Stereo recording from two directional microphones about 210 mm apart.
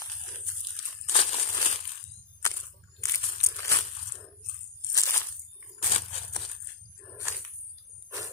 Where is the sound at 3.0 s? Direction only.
15° left (ahead or behind).